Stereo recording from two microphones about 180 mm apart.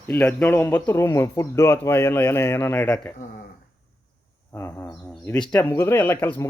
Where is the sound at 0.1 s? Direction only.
10° left (ahead or behind).